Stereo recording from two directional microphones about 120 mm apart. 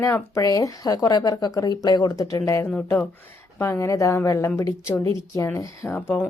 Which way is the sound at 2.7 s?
10° left (ahead or behind).